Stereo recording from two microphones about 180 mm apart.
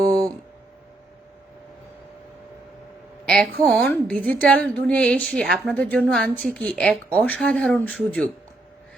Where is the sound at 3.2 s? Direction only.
5° left (ahead or behind).